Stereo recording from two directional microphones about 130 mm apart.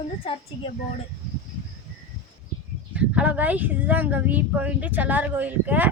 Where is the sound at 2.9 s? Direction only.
10° right (ahead or behind).